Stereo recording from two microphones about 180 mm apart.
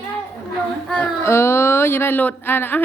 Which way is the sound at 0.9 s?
10° left (ahead or behind).